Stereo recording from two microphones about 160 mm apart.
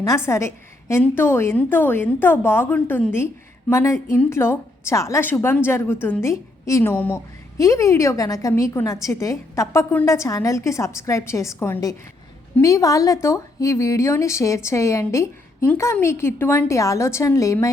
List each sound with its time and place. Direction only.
0.3 s a woman's voice: 20° left (ahead or behind)